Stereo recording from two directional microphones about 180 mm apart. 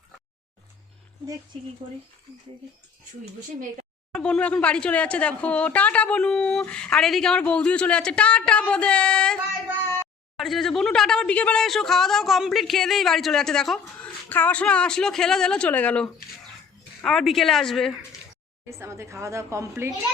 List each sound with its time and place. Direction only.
4.2 s a woman's voice: 5° left (ahead or behind)
18.7 s a woman's voice: 15° right (ahead or behind)